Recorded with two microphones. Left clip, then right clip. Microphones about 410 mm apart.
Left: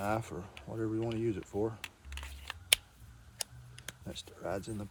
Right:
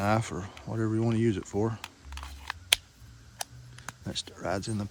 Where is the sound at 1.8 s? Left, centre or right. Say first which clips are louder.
Right 3 dB; centre.